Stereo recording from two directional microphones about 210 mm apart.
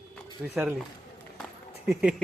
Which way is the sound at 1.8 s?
5° right (ahead or behind).